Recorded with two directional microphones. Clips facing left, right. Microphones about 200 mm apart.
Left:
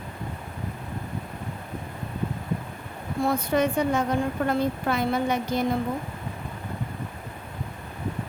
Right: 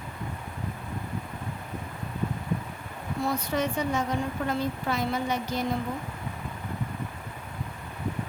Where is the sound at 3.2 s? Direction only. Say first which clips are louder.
Left 5 dB; 55° left (ahead or behind).